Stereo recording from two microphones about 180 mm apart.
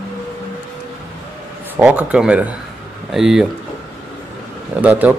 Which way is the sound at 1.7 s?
10° right (ahead or behind).